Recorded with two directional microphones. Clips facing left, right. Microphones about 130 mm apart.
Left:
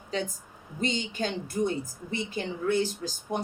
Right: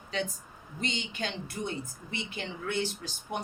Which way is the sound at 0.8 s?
45° left (ahead or behind).